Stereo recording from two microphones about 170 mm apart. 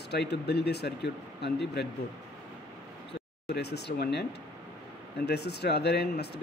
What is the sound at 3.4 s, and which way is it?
Speech, 80° left.